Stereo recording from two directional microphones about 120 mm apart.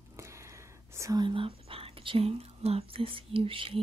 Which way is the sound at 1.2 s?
45° right (ahead or behind).